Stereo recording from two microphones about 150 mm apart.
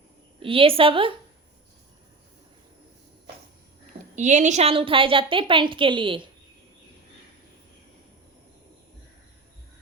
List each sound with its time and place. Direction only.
0.3 s a woman's voice: 35° right (ahead or behind)
4.1 s a woman's voice: 55° right (ahead or behind); by 6.2 s 35° right (ahead or behind)